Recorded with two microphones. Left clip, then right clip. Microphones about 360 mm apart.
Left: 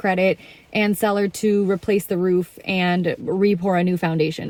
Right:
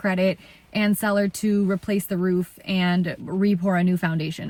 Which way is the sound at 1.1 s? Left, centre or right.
Centre.